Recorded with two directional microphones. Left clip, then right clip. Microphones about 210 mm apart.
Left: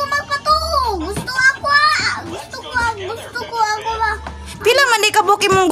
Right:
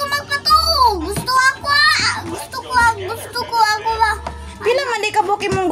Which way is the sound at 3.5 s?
5° right (ahead or behind).